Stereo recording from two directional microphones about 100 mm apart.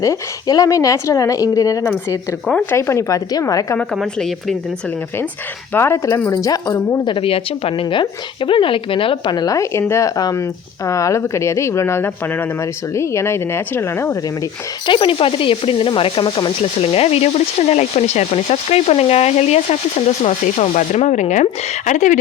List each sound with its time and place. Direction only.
0.0 s speech: 35° left (ahead or behind)
3.9 s a woman's voice: 5° left (ahead or behind)
5.7 s speech: 25° left (ahead or behind)
7.1 s speech: 65° left (ahead or behind); by 14.2 s 25° left (ahead or behind)
14.8 s speech: 60° left (ahead or behind); by 21.5 s 90° left